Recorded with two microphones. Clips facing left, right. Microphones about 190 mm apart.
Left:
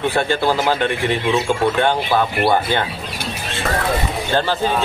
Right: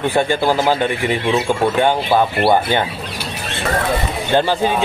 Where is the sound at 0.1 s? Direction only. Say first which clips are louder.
Right 2 dB; 15° right (ahead or behind).